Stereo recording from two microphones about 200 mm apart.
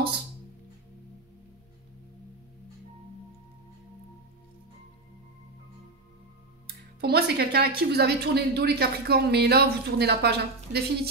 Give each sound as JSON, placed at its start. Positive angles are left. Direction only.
{"t": 7.0, "sound": "speech", "side_deg": -50}